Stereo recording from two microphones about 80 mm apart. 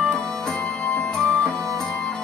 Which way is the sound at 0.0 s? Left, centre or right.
Centre.